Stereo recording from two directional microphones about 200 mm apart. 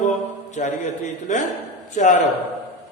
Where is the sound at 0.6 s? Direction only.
35° left (ahead or behind).